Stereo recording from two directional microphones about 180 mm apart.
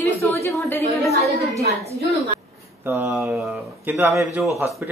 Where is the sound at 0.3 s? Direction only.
15° left (ahead or behind).